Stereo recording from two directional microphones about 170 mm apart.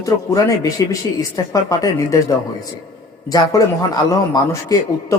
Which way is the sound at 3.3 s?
20° left (ahead or behind).